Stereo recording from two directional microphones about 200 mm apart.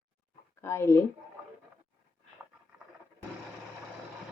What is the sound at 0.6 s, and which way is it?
Speech, 15° left (ahead or behind).